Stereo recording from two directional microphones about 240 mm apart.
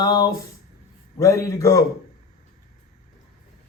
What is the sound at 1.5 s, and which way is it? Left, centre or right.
Speech, centre.